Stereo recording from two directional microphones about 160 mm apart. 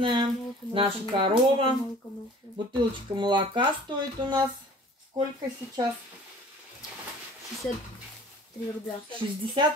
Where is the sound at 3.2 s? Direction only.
30° right (ahead or behind).